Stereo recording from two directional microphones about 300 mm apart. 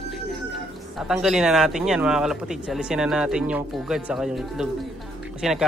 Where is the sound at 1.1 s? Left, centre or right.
Centre.